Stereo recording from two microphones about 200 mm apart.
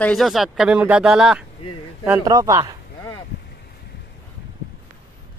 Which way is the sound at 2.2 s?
20° right (ahead or behind).